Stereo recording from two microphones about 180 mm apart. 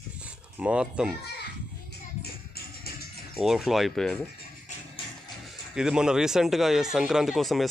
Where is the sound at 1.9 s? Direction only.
60° left (ahead or behind).